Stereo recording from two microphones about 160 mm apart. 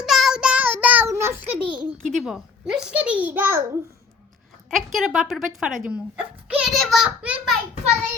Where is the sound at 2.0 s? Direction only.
Centre (ahead or behind).